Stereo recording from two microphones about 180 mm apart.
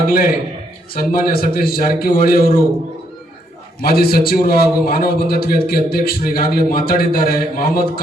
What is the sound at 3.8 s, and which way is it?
A man's voice, 55° left (ahead or behind).